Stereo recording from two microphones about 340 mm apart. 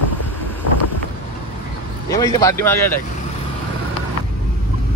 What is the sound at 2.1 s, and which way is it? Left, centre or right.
Speech, centre.